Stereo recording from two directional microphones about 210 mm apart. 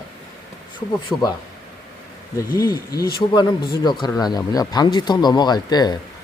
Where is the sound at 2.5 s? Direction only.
20° left (ahead or behind).